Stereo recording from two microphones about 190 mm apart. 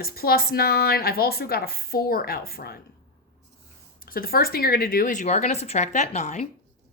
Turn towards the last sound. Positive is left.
turn(degrees=40)  # may be behind; listen again after turning